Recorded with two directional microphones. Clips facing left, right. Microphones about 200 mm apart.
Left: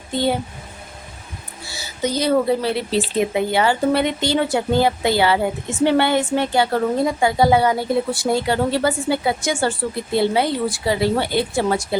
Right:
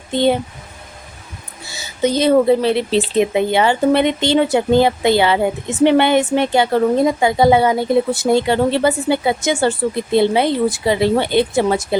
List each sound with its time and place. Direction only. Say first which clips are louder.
0.1 s speech: right 5 dB; 20° right (ahead or behind)
1.7 s a woman's voice: right 5 dB; 20° right (ahead or behind)